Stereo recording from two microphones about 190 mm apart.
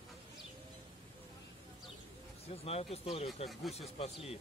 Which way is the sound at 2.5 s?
30° left (ahead or behind).